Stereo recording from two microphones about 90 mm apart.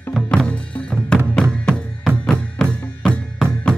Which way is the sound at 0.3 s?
10° left (ahead or behind).